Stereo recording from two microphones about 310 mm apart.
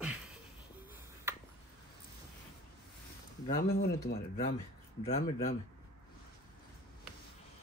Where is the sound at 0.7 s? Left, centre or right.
Centre.